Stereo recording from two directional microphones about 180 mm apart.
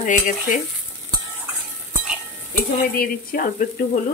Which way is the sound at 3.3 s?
55° left (ahead or behind).